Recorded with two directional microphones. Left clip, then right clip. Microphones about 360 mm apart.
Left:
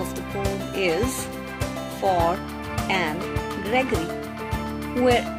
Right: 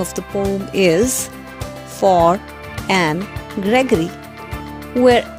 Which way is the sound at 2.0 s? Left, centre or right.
Right.